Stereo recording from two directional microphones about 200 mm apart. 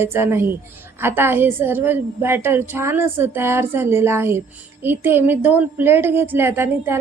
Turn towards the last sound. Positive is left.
turn(degrees=-10)  # may be behind; listen again after turning